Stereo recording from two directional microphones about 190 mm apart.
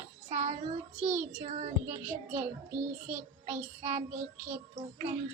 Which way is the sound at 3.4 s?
40° right (ahead or behind).